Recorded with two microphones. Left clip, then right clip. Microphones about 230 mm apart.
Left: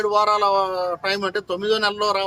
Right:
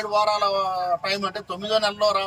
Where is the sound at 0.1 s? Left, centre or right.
Centre.